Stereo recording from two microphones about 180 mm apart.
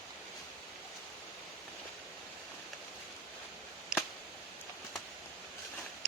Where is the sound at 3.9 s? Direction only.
5° right (ahead or behind).